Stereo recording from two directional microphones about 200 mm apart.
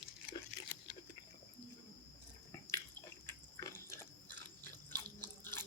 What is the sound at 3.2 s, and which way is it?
Biting, 15° left (ahead or behind).